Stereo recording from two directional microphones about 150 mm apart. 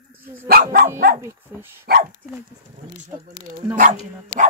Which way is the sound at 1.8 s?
90° right.